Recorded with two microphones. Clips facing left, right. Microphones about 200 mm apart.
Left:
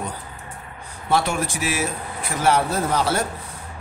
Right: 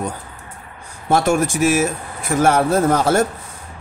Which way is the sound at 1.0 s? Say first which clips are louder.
Right 6 dB; 45° right (ahead or behind).